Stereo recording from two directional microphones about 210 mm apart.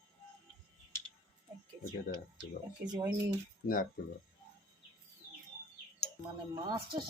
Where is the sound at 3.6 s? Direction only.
40° left (ahead or behind).